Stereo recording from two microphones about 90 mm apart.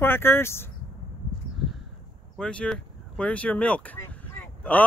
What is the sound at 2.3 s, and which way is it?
Speech, 10° left (ahead or behind).